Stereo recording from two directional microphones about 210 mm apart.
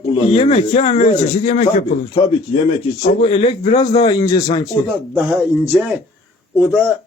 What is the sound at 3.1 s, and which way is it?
A man's voice, 30° left (ahead or behind).